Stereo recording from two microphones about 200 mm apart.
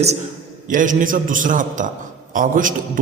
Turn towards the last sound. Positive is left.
turn(degrees=-40)  # may be behind; listen again after turning